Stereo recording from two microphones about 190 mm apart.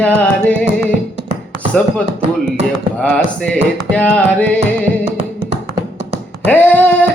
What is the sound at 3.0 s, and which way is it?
Music, 5° left (ahead or behind).